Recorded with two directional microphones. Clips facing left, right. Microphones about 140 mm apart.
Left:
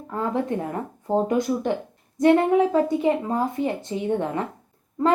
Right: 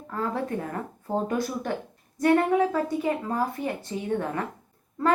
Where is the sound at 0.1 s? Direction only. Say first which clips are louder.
Left 4 dB; 20° left (ahead or behind).